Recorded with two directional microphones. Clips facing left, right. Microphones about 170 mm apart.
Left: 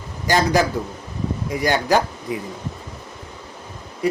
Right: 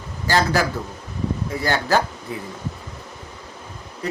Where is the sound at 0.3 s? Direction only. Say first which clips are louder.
Left 1 dB; 15° left (ahead or behind).